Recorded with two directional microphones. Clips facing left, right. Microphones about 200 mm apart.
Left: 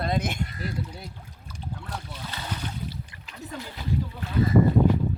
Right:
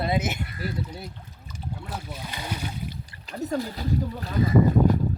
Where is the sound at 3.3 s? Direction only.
40° right (ahead or behind).